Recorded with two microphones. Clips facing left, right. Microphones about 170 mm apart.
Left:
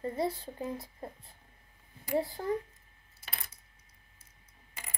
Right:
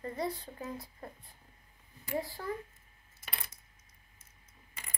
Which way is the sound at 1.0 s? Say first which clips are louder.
Left 3 dB; 25° left (ahead or behind).